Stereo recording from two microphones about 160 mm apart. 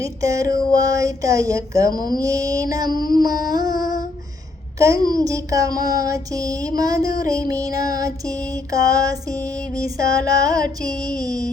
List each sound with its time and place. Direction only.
0.0 s speech: 20° right (ahead or behind)